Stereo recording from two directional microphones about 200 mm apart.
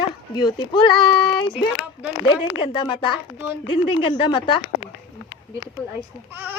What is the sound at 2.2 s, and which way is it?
Speech, 25° left (ahead or behind).